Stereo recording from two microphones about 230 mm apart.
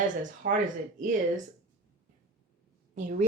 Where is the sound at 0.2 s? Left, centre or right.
Right.